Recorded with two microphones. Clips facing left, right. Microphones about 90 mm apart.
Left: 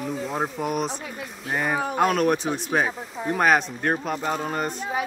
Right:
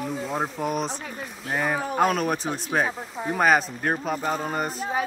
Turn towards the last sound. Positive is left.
turn(degrees=-35)  # may be behind; listen again after turning